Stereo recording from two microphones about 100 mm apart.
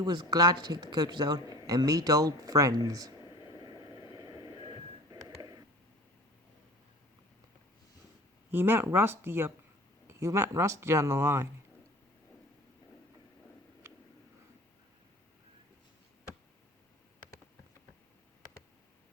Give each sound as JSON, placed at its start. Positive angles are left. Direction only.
{"t": 0.0, "sound": "speech", "side_deg": -45}
{"t": 3.2, "sound": "vehicle", "side_deg": 50}
{"t": 3.6, "sound": "vehicle", "side_deg": -45}
{"t": 5.4, "sound": "a sound", "side_deg": -40}
{"t": 8.4, "sound": "speech", "side_deg": -20}